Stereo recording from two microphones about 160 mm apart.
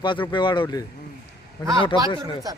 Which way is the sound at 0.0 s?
30° left (ahead or behind).